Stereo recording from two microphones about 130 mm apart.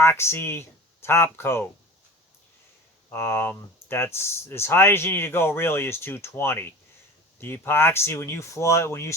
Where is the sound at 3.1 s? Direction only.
20° left (ahead or behind).